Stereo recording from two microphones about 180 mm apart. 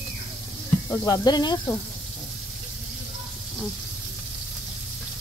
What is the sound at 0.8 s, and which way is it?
Speech, 20° left (ahead or behind).